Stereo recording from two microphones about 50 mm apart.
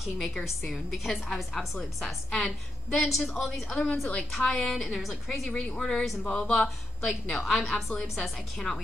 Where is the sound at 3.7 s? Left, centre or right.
Left.